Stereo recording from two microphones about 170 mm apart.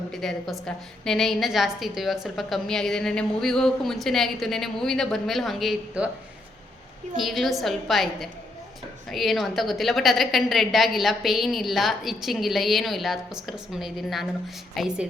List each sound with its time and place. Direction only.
0.1 s a woman's voice: centre (ahead or behind)
7.2 s a woman's voice: centre (ahead or behind)